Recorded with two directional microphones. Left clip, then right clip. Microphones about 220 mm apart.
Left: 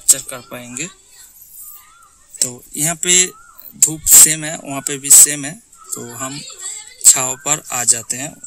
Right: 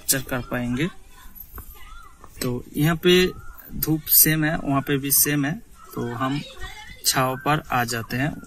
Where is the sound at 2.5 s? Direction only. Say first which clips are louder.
Left 1 dB; 25° left (ahead or behind).